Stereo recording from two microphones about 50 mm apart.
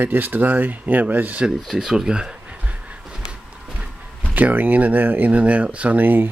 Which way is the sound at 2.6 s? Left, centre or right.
Right.